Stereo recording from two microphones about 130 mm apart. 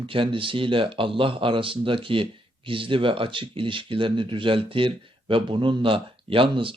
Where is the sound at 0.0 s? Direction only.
40° right (ahead or behind).